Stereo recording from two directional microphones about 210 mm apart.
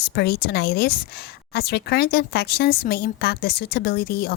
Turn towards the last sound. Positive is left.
turn(degrees=45)  # may be behind; listen again after turning